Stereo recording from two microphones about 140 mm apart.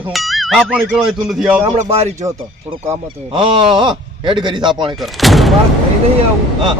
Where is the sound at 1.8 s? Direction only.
50° right (ahead or behind).